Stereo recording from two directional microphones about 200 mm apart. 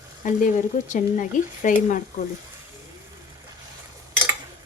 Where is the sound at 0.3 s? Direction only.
40° left (ahead or behind).